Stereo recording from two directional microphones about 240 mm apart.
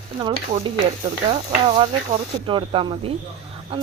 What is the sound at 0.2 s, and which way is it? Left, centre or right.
Speech, centre.